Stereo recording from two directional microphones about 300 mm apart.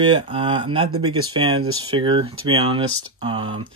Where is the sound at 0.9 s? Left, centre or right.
Right.